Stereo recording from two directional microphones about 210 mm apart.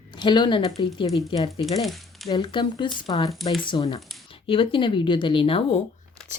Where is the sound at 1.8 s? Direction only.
Centre (ahead or behind).